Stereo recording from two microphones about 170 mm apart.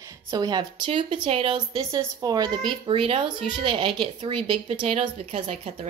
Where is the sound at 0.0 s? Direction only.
20° right (ahead or behind).